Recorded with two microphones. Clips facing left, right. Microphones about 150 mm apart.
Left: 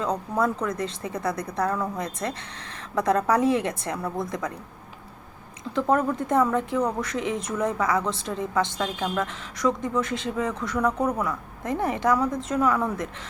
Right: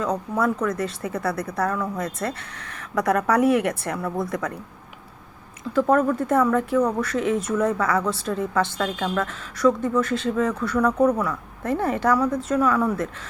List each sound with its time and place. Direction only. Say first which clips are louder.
0.3 s speech: right 2 dB; 25° left (ahead or behind)
5.7 s a woman's voice: right 4 dB; 20° left (ahead or behind)